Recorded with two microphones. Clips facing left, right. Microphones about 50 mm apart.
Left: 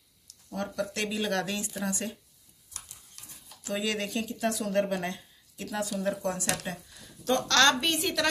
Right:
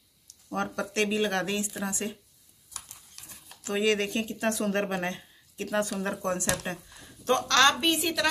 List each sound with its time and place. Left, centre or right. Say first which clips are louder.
0.5 s speech: right 2 dB; right
0.9 s speech: right 5 dB; right
3.8 s speech: right 7 dB; right
7.0 s a sound: right 1 dB; right
7.5 s a woman's voice: right 1 dB; centre